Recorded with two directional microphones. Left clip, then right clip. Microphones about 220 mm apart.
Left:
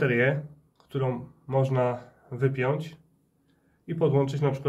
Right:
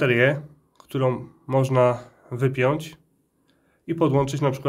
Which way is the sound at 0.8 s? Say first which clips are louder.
Right 6 dB; 55° right (ahead or behind).